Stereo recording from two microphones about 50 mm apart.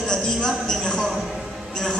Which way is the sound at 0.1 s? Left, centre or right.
Centre.